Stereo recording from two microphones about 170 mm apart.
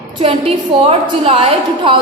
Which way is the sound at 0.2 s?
35° right (ahead or behind).